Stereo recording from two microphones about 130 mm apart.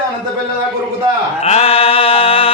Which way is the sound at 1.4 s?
50° left (ahead or behind).